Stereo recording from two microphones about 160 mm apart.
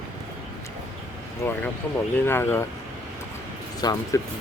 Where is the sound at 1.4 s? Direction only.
15° left (ahead or behind).